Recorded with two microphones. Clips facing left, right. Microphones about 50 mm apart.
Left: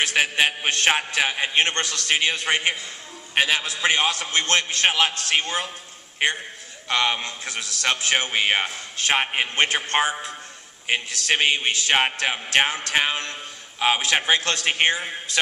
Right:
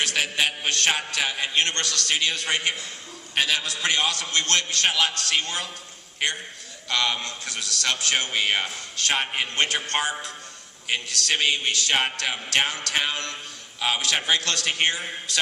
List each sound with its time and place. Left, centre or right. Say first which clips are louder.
0.0 s a man's voice: left 4 dB; left